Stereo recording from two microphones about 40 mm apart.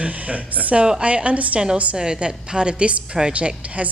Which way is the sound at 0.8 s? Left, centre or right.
Right.